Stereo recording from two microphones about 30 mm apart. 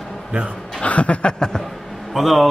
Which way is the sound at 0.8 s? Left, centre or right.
Left.